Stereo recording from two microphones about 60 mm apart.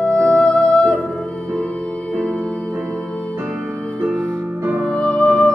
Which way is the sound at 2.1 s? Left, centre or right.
Centre.